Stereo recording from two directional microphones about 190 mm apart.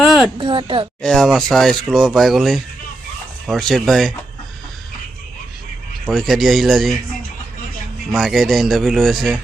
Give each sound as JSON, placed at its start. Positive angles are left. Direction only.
{"t": 0.3, "sound": "a woman's voice", "side_deg": -25}
{"t": 1.0, "sound": "speech", "side_deg": 5}
{"t": 6.1, "sound": "speech", "side_deg": 0}
{"t": 8.1, "sound": "speech", "side_deg": 0}